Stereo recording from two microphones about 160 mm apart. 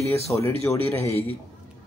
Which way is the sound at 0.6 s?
15° left (ahead or behind).